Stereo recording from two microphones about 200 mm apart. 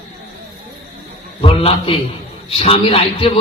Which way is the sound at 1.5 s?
30° left (ahead or behind).